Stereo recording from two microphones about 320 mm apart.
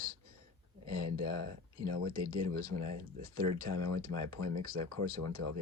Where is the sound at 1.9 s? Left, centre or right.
Right.